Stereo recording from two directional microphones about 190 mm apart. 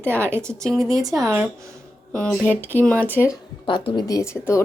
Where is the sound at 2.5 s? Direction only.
10° right (ahead or behind).